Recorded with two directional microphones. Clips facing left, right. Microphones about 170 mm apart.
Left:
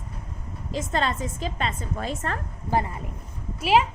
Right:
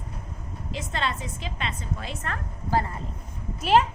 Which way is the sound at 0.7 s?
45° left (ahead or behind).